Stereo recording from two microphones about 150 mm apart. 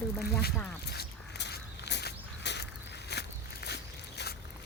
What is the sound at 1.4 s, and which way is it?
Walk, 90° left.